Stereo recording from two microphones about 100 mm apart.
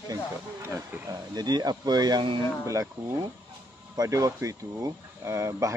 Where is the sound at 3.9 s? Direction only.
35° right (ahead or behind).